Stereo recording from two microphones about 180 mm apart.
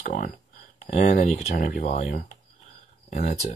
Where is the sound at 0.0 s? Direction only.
55° left (ahead or behind).